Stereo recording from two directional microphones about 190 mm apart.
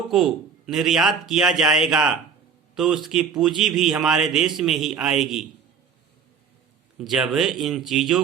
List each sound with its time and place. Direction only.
0.7 s a man's voice: centre (ahead or behind)
7.0 s a man's voice: centre (ahead or behind)